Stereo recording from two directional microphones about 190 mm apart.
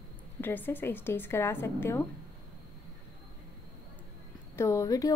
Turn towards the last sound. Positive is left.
turn(degrees=15)  # may be behind; listen again after turning